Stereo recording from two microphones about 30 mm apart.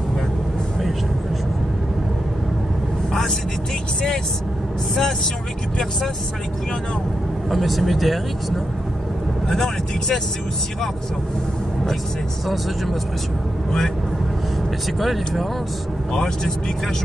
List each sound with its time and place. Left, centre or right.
7.4 s speech: centre
9.5 s speech: centre
15.0 s speech: centre
16.1 s speech: centre